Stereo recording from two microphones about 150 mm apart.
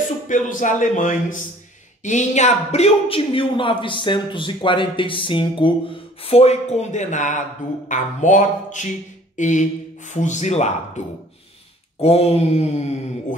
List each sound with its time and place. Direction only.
0.3 s a man's voice: 60° left (ahead or behind); by 5.7 s 35° left (ahead or behind)
6.2 s mantra: 45° left (ahead or behind)
7.9 s a man's voice: 55° left (ahead or behind)
9.4 s mantra: 55° left (ahead or behind)
12.0 s mantra: 45° left (ahead or behind)